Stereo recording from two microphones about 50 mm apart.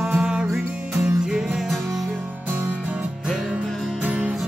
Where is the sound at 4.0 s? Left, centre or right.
Right.